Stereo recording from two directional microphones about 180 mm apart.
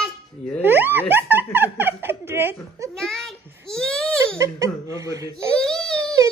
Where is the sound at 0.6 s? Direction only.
10° right (ahead or behind).